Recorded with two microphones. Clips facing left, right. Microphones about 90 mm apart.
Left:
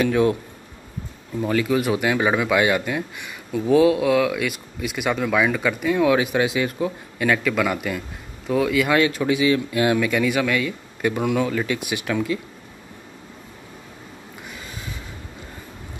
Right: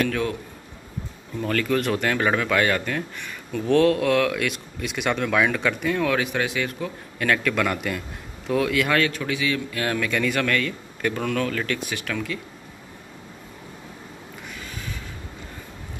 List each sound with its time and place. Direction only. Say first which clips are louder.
0.0 s a man's voice: left 6 dB; 15° left (ahead or behind)
1.4 s a man's voice: left 2 dB; 10° left (ahead or behind)